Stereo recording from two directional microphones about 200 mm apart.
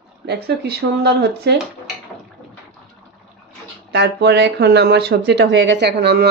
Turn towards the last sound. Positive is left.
turn(degrees=-55)  # may be behind; listen again after turning